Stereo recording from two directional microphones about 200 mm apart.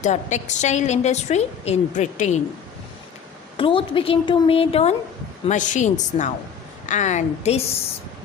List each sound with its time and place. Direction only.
0.0 s a woman's voice: 35° left (ahead or behind)
3.6 s a woman's voice: 25° left (ahead or behind)